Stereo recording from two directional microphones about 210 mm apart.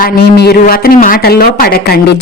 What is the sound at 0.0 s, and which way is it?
Speech, 50° left (ahead or behind).